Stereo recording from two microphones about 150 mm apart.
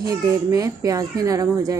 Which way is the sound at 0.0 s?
25° right (ahead or behind).